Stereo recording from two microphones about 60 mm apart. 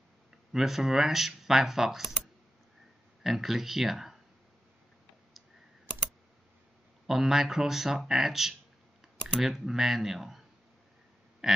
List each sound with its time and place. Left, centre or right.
0.5 s speech: centre
3.3 s speech: centre
7.1 s speech: centre
11.4 s pig: centre